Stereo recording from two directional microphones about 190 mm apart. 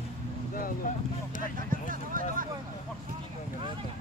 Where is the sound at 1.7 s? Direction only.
45° right (ahead or behind).